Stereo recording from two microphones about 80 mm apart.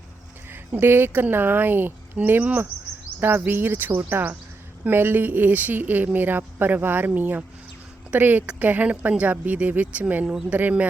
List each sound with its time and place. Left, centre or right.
0.5 s speech: right
10.2 s speech: centre